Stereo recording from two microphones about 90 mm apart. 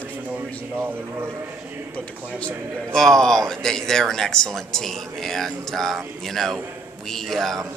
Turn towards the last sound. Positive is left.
turn(degrees=5)  # may be behind; listen again after turning